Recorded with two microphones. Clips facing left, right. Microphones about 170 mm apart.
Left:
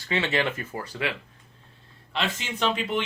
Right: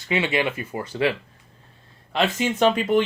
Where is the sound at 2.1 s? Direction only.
45° right (ahead or behind).